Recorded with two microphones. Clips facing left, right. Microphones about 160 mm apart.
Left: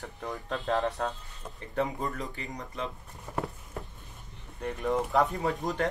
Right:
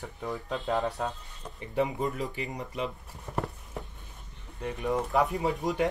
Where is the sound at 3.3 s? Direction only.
Centre (ahead or behind).